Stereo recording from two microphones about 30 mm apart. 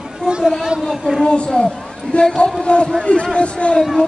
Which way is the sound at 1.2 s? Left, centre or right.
Left.